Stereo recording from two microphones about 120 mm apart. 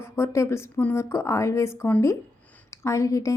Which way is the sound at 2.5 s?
25° left (ahead or behind).